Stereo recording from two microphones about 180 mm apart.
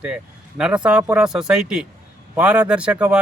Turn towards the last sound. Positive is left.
turn(degrees=-5)  # may be behind; listen again after turning